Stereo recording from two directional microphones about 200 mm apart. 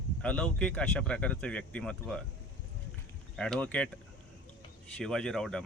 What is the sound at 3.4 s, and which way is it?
Speech, 5° left (ahead or behind).